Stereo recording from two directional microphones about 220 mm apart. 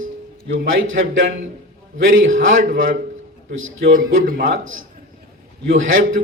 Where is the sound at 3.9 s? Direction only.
40° right (ahead or behind).